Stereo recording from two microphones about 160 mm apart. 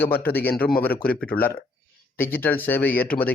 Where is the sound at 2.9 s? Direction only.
70° left (ahead or behind).